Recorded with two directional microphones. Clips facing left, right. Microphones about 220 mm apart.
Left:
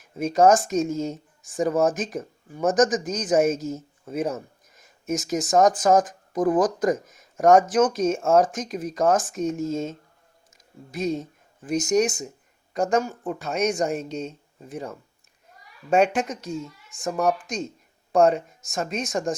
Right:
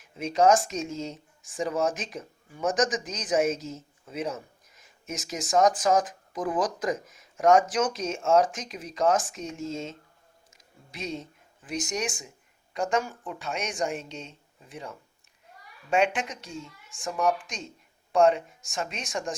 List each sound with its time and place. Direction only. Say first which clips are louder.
0.0 s speech: left 4 dB; 50° left (ahead or behind)
10.9 s speech: left 9 dB; 45° left (ahead or behind)